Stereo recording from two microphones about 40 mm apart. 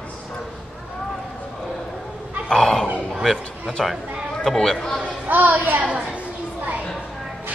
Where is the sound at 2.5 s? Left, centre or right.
Centre.